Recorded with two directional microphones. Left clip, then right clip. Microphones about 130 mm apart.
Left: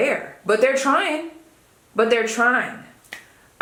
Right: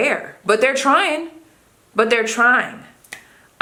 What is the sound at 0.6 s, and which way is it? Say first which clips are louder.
Speech: right 2 dB; 40° right (ahead or behind).